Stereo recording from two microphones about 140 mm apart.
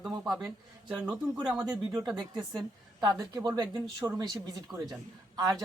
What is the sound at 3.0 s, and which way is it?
Speech, 30° right (ahead or behind).